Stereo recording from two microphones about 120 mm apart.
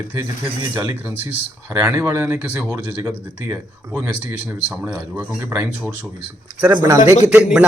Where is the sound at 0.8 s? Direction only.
25° right (ahead or behind).